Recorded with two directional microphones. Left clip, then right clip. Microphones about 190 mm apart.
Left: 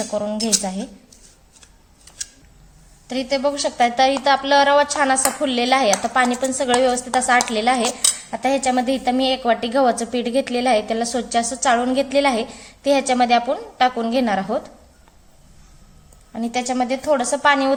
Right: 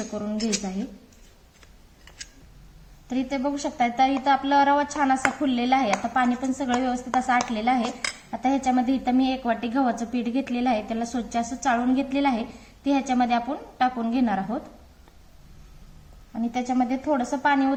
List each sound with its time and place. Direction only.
0.2 s speech: 40° left (ahead or behind)
3.1 s cutlery: 45° left (ahead or behind)
16.3 s cutlery: 50° left (ahead or behind)